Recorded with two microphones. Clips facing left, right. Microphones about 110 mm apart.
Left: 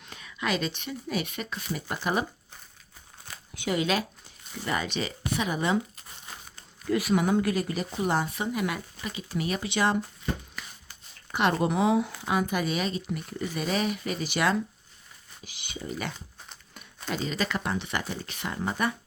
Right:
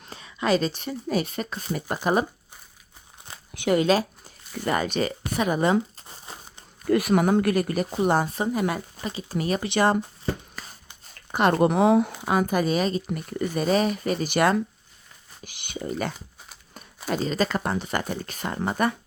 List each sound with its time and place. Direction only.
0.0 s speech: 35° right (ahead or behind)
3.5 s speech: 65° right (ahead or behind)
3.8 s speech: 40° right (ahead or behind)
4.6 s speech: 50° right (ahead or behind)
6.0 s crumpling: 30° right (ahead or behind)
6.8 s speech: 55° right (ahead or behind)
9.6 s speech: 55° right (ahead or behind)
10.6 s a sound: 40° right (ahead or behind)
11.5 s speech: 55° right (ahead or behind)
15.6 s speech: 55° right (ahead or behind)